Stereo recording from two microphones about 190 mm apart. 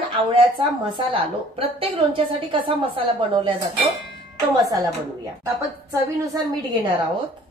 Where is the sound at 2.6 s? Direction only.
25° right (ahead or behind).